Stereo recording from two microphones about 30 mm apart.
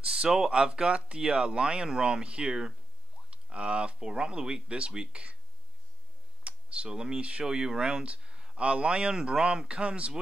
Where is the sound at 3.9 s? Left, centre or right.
Right.